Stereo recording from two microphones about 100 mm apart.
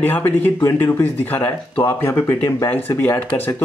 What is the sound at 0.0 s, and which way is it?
Speech, 20° left (ahead or behind).